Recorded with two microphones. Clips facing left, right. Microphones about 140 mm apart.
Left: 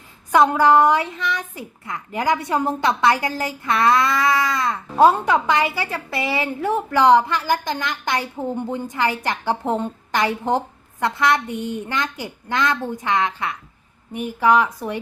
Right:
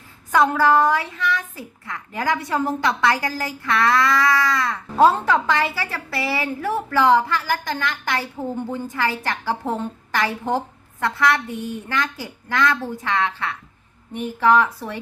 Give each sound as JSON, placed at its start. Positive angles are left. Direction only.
{"t": 0.3, "sound": "a child's voice", "side_deg": 20}